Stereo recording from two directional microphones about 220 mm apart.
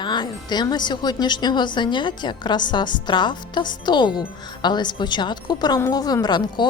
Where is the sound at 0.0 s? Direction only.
20° left (ahead or behind).